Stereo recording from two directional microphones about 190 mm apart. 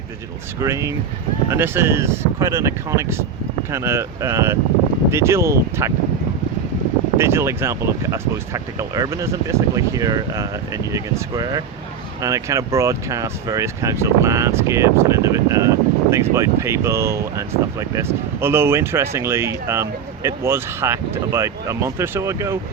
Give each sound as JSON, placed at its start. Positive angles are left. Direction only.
{"t": 0.6, "sound": "speech", "side_deg": -15}
{"t": 7.2, "sound": "speech", "side_deg": -15}